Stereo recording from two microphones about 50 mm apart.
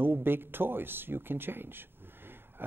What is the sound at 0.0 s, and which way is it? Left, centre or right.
Speech, right.